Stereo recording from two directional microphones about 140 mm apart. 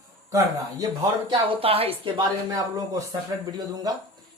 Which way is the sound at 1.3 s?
40° right (ahead or behind).